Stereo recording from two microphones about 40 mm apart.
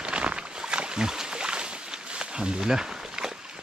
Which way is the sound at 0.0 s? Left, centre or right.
Right.